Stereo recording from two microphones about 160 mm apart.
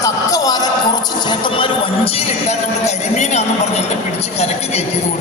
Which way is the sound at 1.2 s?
30° left (ahead or behind).